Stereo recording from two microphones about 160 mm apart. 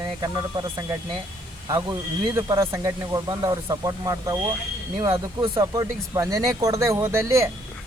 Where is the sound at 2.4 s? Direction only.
20° right (ahead or behind).